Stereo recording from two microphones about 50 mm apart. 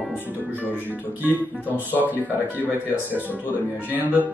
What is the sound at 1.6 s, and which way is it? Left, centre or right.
Speech, left.